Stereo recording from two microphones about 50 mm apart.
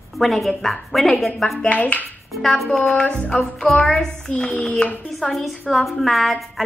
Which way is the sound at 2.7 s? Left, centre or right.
Centre.